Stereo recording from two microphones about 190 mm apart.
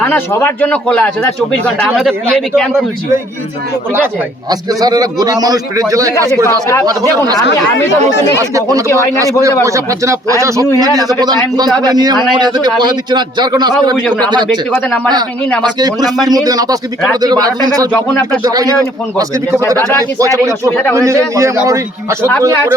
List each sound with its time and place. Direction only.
0.0 s speech: 10° left (ahead or behind)
3.9 s a man's voice: 15° right (ahead or behind)
9.4 s a man's voice: 15° right (ahead or behind)
14.7 s speech: 10° left (ahead or behind)
15.6 s a man's voice: 20° right (ahead or behind)